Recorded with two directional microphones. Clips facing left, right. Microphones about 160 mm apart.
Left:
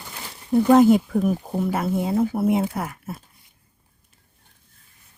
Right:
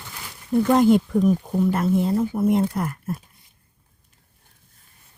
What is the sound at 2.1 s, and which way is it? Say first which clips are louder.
Speech: even; 10° left (ahead or behind).